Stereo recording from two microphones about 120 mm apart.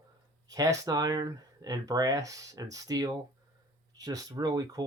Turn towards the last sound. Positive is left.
turn(degrees=-30)  # may be behind; listen again after turning